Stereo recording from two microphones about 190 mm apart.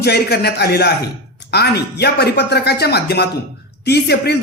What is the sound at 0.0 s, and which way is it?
Speech, 55° left (ahead or behind).